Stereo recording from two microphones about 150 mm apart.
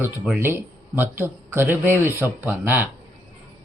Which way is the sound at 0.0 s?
15° right (ahead or behind).